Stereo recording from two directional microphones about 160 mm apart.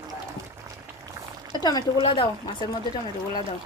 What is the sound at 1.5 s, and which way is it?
Speech, 25° left (ahead or behind).